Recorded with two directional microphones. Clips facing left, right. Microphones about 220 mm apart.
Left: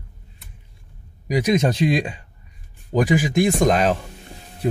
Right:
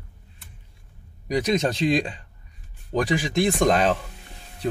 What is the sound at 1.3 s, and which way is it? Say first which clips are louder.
Speech: left 3 dB; 15° left (ahead or behind).